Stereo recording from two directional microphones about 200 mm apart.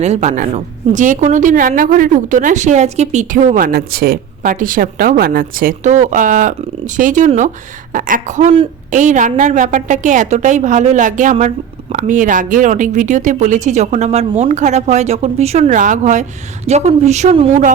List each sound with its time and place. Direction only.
0.0 s a woman's voice: 35° right (ahead or behind)